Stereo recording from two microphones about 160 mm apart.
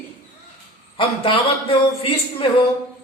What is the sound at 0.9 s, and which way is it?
A man's voice, 35° left (ahead or behind).